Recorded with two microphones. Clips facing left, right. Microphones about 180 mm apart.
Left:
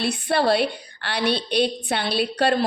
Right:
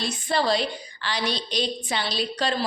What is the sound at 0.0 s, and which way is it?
A woman's voice, 60° left (ahead or behind).